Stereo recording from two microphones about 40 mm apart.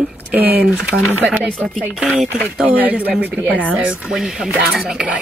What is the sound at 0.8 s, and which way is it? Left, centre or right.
Speech, right.